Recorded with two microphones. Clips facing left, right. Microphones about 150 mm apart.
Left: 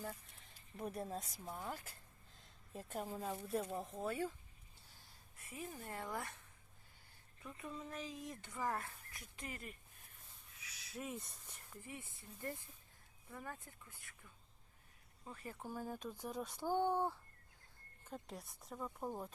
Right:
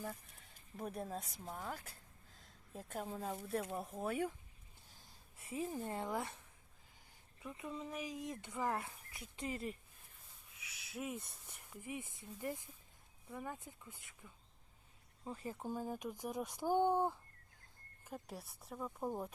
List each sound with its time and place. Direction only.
0.1 s a woman's voice: centre (ahead or behind)
2.4 s a sound: centre (ahead or behind)
3.2 s speech: 5° right (ahead or behind)
5.4 s speech: 25° right (ahead or behind)
7.4 s speech: 10° right (ahead or behind)
10.9 s a woman's voice: 5° right (ahead or behind)
11.7 s speech: 15° right (ahead or behind)